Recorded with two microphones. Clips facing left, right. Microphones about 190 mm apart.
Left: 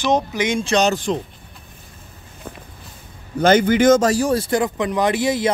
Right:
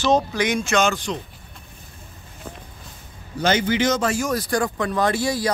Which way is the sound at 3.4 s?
50° left (ahead or behind).